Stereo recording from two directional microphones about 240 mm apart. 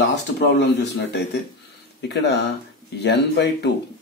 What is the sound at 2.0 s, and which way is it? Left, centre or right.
Speech, left.